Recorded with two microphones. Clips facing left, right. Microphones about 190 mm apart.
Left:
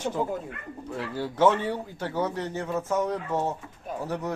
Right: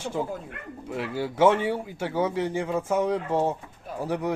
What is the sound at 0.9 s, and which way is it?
Speech, 10° right (ahead or behind).